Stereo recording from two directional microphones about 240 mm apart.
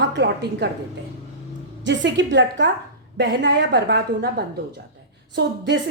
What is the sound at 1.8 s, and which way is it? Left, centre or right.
A woman's voice, right.